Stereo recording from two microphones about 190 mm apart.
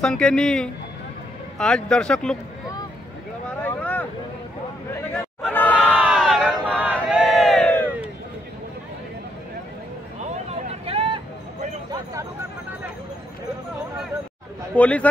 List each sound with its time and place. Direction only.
0.0 s speech: 5° left (ahead or behind)
3.6 s vehicle: 10° left (ahead or behind)
5.5 s crowd: 10° left (ahead or behind)
5.9 s crowd: 5° right (ahead or behind)
10.5 s vehicle: 35° right (ahead or behind)
11.9 s a sound: 15° right (ahead or behind)
14.8 s speech: 5° left (ahead or behind)